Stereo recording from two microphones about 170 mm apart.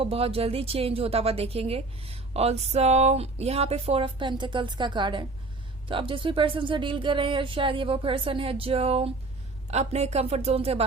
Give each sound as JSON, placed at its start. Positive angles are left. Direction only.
{"t": 0.0, "sound": "a woman's voice", "side_deg": -35}